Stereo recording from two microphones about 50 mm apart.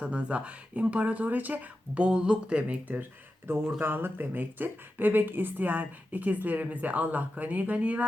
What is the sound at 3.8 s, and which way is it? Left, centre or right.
Speech, right.